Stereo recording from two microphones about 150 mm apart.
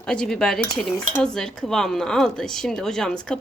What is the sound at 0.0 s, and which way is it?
Speech, 5° left (ahead or behind).